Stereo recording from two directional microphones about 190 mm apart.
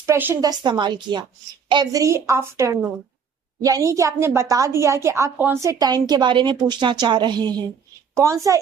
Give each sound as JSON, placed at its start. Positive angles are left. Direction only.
{"t": 0.0, "sound": "speech", "side_deg": -15}
{"t": 0.6, "sound": "a woman's voice", "side_deg": -25}